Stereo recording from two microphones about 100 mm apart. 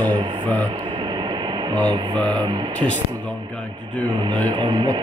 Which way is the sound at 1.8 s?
15° left (ahead or behind).